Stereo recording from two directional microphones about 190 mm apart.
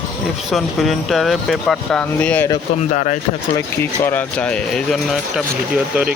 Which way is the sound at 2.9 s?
35° left (ahead or behind).